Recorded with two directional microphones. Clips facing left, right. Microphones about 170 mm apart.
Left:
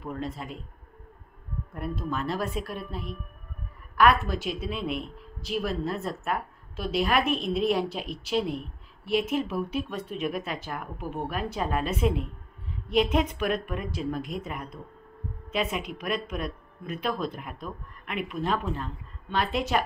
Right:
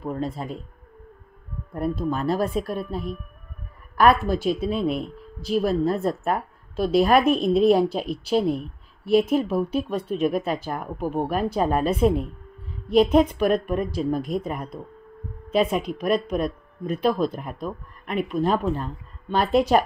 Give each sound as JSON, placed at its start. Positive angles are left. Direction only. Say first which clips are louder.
{"t": 0.0, "sound": "speech", "louder": "right 6 dB", "side_deg": -40}
{"t": 1.7, "sound": "speech", "louder": "right 7 dB", "side_deg": -40}